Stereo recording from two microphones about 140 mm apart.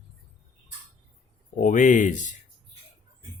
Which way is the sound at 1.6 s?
65° left (ahead or behind).